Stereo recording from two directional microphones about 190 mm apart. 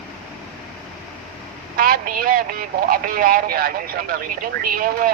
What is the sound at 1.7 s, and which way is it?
Speech, 50° right (ahead or behind).